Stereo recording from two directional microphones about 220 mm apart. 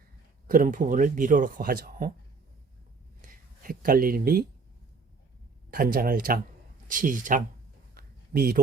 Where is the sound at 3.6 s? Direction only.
40° right (ahead or behind).